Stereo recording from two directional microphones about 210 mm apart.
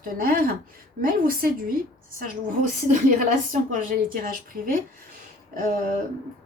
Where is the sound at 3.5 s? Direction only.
40° right (ahead or behind).